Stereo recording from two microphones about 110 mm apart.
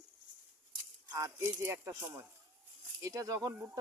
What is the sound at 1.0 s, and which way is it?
Speech, 30° right (ahead or behind).